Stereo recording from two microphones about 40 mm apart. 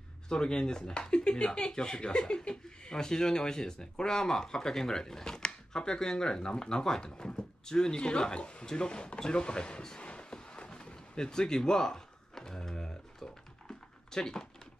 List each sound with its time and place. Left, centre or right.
0.3 s speech: centre
13.2 s typing: centre